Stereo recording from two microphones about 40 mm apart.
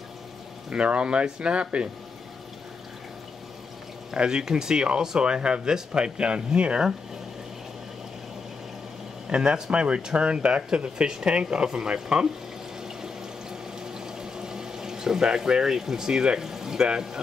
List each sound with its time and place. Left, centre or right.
0.7 s speech: right
4.1 s speech: right
9.3 s speech: right
12.8 s water: centre
16.4 s speech: centre